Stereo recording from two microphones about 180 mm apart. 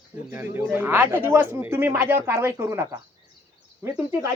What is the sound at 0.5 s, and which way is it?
Speech, 10° right (ahead or behind).